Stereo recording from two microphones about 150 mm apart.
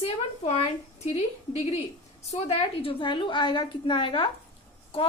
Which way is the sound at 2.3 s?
40° left (ahead or behind).